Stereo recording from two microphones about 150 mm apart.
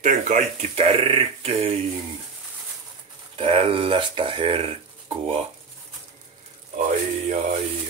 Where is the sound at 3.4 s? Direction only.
35° right (ahead or behind).